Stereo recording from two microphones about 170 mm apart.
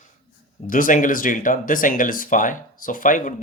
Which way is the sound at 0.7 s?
50° left (ahead or behind).